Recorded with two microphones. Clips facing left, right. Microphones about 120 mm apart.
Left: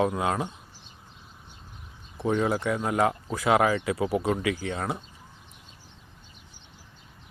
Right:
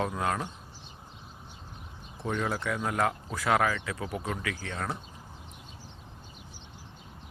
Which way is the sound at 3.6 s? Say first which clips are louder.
Left 6 dB; 20° left (ahead or behind).